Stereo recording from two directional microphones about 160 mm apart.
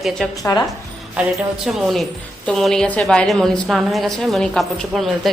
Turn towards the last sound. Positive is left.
turn(degrees=0)  # may be behind; listen again after turning